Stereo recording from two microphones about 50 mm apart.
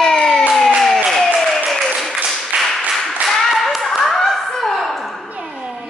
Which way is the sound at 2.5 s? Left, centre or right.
Right.